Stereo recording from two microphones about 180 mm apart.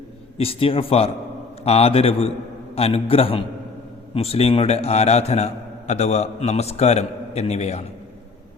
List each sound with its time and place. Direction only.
0.3 s a man's voice: 30° left (ahead or behind)